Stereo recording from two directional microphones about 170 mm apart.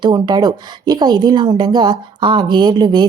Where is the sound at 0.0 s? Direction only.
25° right (ahead or behind).